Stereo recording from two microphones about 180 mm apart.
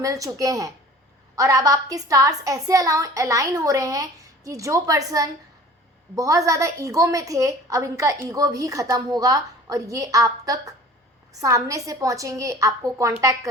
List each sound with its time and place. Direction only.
0.0 s a woman's voice: 20° right (ahead or behind)